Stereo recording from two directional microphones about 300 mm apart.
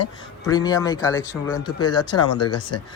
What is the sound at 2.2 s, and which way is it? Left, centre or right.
Speech, left.